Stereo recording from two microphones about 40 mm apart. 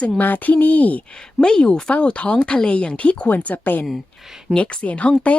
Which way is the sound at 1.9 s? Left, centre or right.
Left.